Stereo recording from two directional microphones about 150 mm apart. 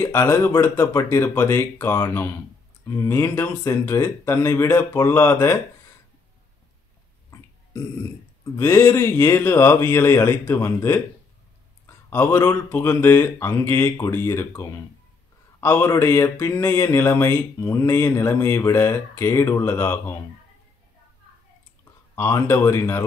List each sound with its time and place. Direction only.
0.0 s speech: 15° left (ahead or behind)
7.2 s burping: 20° left (ahead or behind)
8.5 s speech: 20° left (ahead or behind)
22.1 s speech: 15° left (ahead or behind)